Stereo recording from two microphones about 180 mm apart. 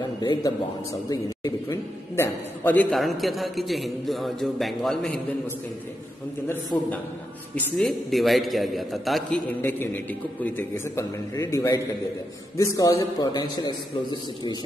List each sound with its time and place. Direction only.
0.2 s a man's voice: 25° left (ahead or behind); by 5.2 s centre (ahead or behind)
6.5 s a man's voice: 10° left (ahead or behind)